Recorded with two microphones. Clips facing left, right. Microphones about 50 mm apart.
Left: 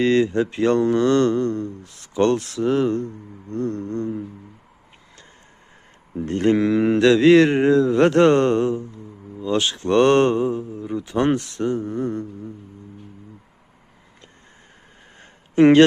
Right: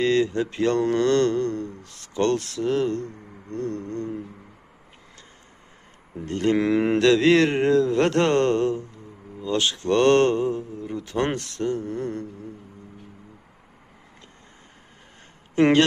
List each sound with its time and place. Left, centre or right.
0.0 s speech: left
3.5 s speech: left
6.2 s speech: left
6.6 s speech: centre
7.0 s speech: centre
9.4 s speech: left
9.9 s speech: centre